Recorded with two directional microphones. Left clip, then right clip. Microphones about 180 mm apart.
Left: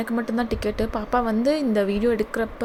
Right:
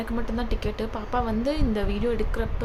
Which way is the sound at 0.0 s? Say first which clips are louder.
Left 5 dB; 30° left (ahead or behind).